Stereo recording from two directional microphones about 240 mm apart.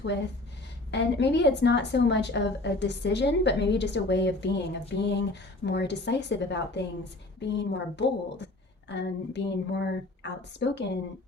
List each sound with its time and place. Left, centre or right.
0.0 s a woman's voice: left